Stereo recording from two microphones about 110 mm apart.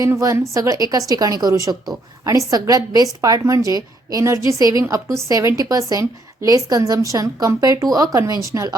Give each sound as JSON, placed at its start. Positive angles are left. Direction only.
{"t": 0.0, "sound": "a woman's voice", "side_deg": -30}